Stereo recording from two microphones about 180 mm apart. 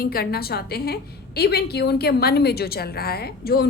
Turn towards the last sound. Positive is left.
turn(degrees=60)  # may be behind; listen again after turning